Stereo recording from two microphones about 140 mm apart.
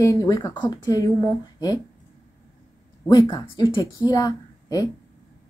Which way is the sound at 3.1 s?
30° left (ahead or behind).